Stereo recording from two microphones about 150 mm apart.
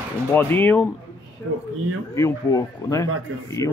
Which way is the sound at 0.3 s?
15° left (ahead or behind).